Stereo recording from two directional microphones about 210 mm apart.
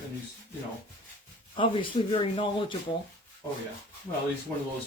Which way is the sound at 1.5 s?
25° left (ahead or behind).